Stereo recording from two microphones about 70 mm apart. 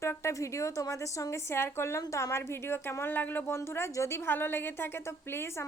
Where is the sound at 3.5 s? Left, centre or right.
Left.